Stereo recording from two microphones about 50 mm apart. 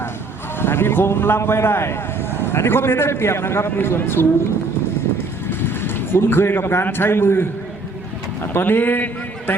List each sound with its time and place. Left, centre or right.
0.6 s a man's voice: left
5.1 s vehicle: left
8.4 s a man's voice: left